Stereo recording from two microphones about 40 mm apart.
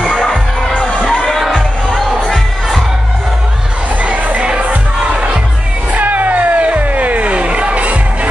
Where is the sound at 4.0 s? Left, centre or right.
Right.